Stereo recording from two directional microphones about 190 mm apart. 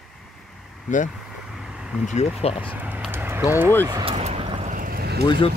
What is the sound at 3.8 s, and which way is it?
Speech, 20° right (ahead or behind).